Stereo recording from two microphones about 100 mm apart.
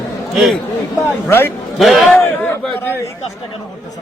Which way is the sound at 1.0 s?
25° left (ahead or behind).